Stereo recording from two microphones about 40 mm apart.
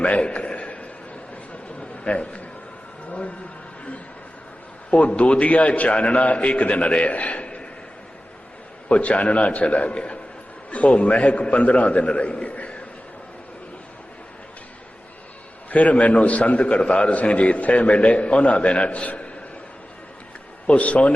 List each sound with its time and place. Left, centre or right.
0.0 s a sound: left
4.9 s a man's voice: left
8.9 s a man's voice: left
15.7 s a man's voice: left
20.7 s a man's voice: left